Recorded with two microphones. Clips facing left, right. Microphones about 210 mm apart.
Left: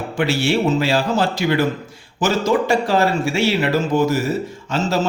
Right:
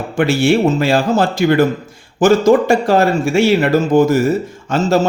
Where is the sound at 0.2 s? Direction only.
50° right (ahead or behind).